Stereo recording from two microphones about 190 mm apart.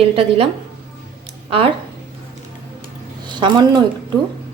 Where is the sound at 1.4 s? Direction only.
30° right (ahead or behind).